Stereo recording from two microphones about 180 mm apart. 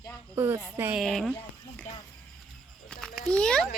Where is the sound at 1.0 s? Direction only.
Centre (ahead or behind).